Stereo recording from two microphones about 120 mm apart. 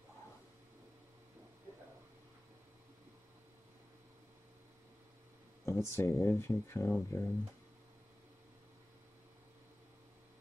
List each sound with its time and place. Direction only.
5.7 s speech: 25° left (ahead or behind)